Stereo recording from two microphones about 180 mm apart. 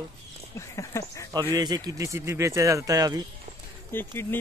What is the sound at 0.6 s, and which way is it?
Speech, 15° left (ahead or behind).